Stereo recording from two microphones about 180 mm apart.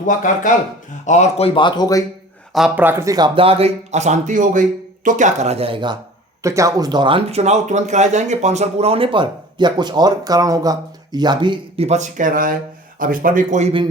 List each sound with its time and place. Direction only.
1.0 s speech: 40° left (ahead or behind); by 2.0 s 20° left (ahead or behind)
2.5 s speech: centre (ahead or behind); by 11.9 s 25° right (ahead or behind)
11.9 s speech: 40° right (ahead or behind)